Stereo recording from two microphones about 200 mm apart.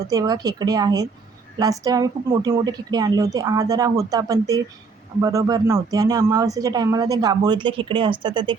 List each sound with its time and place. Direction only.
0.1 s speech: 20° right (ahead or behind)